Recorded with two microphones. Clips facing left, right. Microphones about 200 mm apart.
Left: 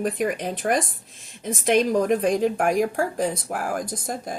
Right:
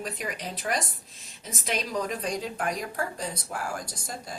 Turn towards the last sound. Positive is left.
turn(degrees=50)  # may be behind; listen again after turning